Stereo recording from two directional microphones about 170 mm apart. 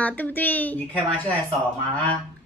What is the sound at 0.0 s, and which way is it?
Speech, 10° left (ahead or behind).